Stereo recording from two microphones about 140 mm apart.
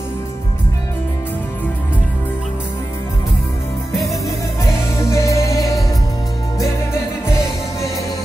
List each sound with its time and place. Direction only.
5.0 s music: 20° left (ahead or behind)